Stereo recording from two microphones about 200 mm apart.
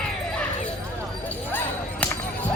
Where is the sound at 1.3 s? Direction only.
10° left (ahead or behind).